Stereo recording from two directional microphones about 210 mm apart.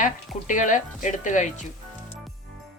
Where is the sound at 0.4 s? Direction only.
35° left (ahead or behind).